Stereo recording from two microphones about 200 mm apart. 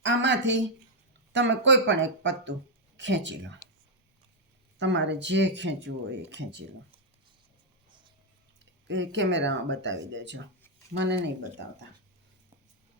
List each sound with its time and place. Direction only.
0.0 s speech: 65° right (ahead or behind)
4.8 s speech: 60° right (ahead or behind)
8.9 s speech: 65° right (ahead or behind)